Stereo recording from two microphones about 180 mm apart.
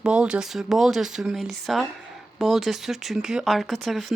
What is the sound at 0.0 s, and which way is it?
Speech, 5° right (ahead or behind).